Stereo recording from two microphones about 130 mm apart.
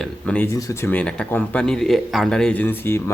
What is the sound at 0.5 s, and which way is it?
Speech, 25° left (ahead or behind).